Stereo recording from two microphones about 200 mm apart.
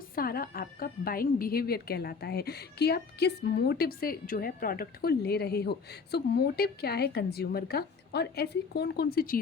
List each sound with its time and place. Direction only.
0.2 s speech: 50° left (ahead or behind)